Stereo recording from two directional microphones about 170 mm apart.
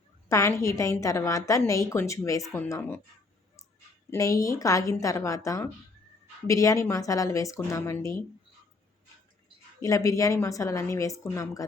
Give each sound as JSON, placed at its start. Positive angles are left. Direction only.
{"t": 0.3, "sound": "a woman's voice", "side_deg": 15}
{"t": 4.1, "sound": "a woman's voice", "side_deg": 20}
{"t": 9.8, "sound": "a woman's voice", "side_deg": 20}